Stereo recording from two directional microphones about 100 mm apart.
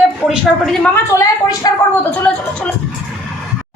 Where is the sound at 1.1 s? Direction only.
35° left (ahead or behind).